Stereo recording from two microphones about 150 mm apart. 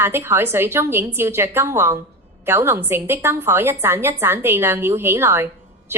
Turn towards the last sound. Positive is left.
turn(degrees=-15)  # may be behind; listen again after turning